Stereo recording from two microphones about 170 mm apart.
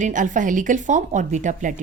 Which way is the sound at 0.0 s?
50° right (ahead or behind).